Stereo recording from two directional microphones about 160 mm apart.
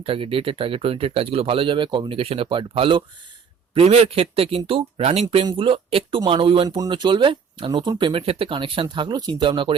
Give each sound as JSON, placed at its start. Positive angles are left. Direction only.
{"t": 0.0, "sound": "speech", "side_deg": -35}